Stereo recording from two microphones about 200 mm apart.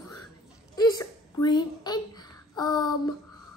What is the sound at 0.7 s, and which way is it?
A woman's voice, 20° left (ahead or behind).